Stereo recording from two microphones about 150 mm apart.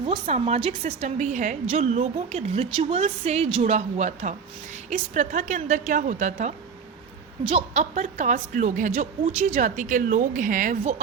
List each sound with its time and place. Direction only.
0.0 s a woman's voice: 45° right (ahead or behind)
7.4 s a woman's voice: 45° right (ahead or behind)